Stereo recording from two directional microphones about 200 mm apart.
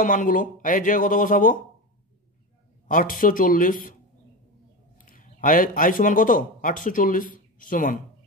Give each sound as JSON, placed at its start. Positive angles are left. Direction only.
{"t": 0.0, "sound": "speech", "side_deg": 40}
{"t": 2.9, "sound": "speech", "side_deg": 45}
{"t": 4.9, "sound": "a man's voice", "side_deg": 45}